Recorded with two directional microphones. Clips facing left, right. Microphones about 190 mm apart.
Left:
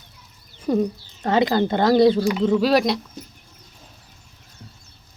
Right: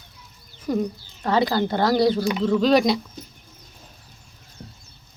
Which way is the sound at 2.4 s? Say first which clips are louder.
Even; 10° left (ahead or behind).